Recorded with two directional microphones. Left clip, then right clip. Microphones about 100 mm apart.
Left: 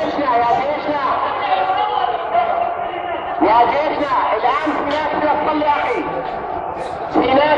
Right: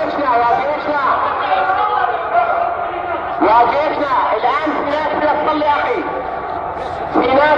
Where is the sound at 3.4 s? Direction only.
10° right (ahead or behind).